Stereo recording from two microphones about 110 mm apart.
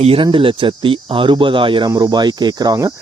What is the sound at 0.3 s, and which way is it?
Speech, 50° right (ahead or behind).